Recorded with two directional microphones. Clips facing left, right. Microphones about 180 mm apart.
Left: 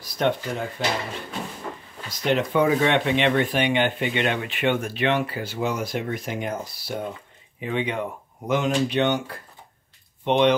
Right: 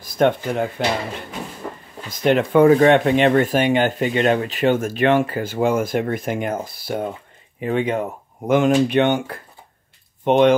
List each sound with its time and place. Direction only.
0.0 s speech: 50° right (ahead or behind)
2.0 s speech: 50° right (ahead or behind)
10.2 s speech: 50° right (ahead or behind)